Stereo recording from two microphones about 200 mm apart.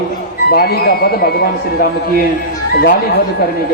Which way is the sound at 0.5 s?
50° left (ahead or behind).